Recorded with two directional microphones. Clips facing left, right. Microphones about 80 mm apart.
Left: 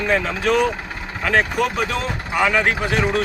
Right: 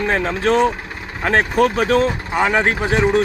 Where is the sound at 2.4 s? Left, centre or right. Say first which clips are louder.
Right 1 dB; right.